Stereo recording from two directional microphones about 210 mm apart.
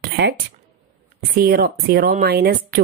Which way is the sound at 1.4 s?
45° right (ahead or behind).